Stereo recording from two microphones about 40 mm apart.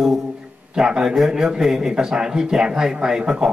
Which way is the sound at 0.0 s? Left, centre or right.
Centre.